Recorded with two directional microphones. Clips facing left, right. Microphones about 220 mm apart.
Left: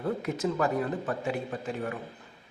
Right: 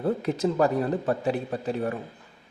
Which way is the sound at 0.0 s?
35° right (ahead or behind).